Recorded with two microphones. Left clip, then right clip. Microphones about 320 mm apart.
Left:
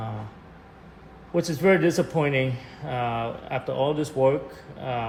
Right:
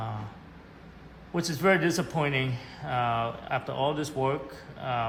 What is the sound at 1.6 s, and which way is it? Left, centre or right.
Speech, right.